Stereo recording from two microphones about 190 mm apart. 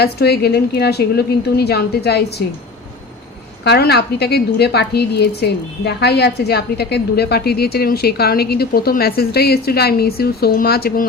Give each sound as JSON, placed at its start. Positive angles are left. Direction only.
{"t": 0.0, "sound": "a woman's voice", "side_deg": 60}
{"t": 3.6, "sound": "a woman's voice", "side_deg": 60}